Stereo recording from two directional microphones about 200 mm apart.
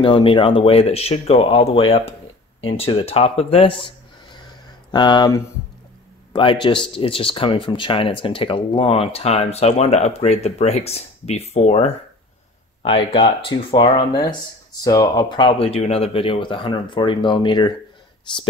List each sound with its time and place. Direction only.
0.0 s speech: 25° left (ahead or behind)
4.9 s speech: 20° left (ahead or behind)